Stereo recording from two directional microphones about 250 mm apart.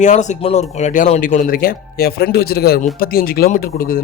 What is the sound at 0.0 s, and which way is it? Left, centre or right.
Speech, left.